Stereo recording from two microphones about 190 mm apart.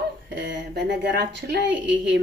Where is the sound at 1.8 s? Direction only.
75° right (ahead or behind).